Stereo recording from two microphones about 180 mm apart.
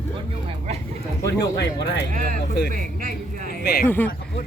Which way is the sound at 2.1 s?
50° right (ahead or behind).